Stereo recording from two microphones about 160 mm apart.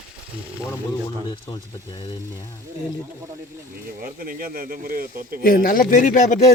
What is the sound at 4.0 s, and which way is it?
Speech, 65° right (ahead or behind).